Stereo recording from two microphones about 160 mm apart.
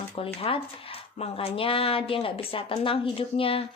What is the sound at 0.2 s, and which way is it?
A woman's voice, 35° left (ahead or behind).